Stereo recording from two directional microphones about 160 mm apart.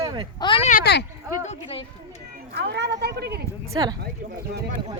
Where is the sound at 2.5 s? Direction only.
90° right.